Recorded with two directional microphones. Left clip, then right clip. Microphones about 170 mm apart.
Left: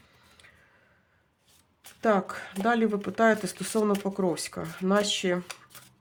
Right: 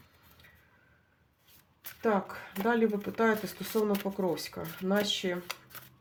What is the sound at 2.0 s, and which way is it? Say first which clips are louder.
Speech: left 5 dB; 40° left (ahead or behind).